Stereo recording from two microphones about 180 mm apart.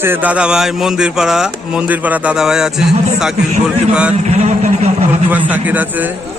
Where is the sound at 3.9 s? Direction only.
5° right (ahead or behind).